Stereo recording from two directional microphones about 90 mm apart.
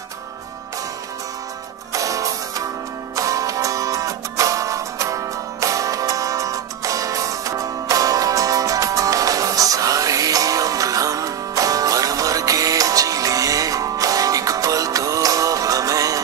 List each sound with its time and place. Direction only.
1.9 s music: 40° right (ahead or behind)